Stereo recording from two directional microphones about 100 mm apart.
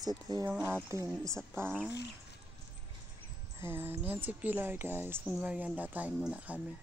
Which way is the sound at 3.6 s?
20° right (ahead or behind).